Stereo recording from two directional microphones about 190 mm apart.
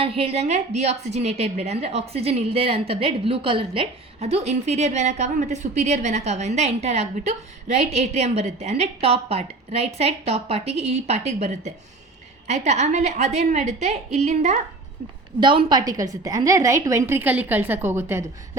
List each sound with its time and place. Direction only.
0.0 s a woman's voice: 30° right (ahead or behind)
15.4 s a woman's voice: 25° right (ahead or behind)